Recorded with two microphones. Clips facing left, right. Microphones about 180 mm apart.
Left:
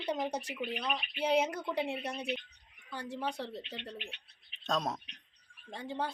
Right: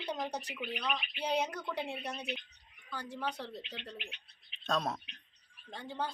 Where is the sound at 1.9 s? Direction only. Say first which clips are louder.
Left 3 dB; 25° left (ahead or behind).